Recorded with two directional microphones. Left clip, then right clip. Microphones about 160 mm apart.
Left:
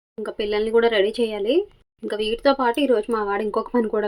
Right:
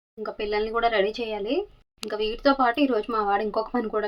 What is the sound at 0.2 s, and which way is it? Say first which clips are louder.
Speech: left 3 dB; 20° left (ahead or behind).